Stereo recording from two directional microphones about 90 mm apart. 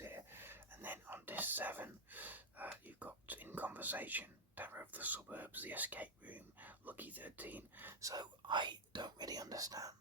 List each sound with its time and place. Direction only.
0.0 s whispering: 25° right (ahead or behind)
2.8 s speech: 20° right (ahead or behind)
8.0 s speech: 50° right (ahead or behind)